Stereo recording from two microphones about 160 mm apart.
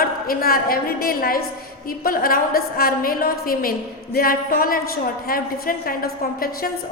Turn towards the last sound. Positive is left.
turn(degrees=65)  # may be behind; listen again after turning